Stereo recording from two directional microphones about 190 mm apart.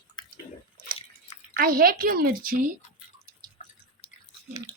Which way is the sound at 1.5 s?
50° right (ahead or behind).